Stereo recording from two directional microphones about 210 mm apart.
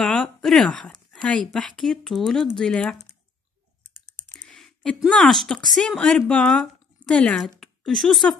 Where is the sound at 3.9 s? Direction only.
35° right (ahead or behind).